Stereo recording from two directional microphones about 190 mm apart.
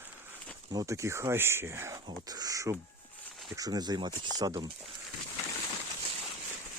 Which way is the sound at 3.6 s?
20° right (ahead or behind).